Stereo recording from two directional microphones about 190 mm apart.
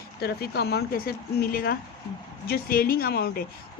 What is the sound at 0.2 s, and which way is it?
A woman's voice, 55° left (ahead or behind).